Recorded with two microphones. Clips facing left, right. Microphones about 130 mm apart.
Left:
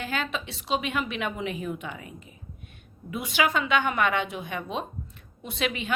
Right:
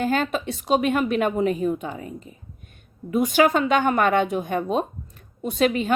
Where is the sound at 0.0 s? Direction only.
45° right (ahead or behind).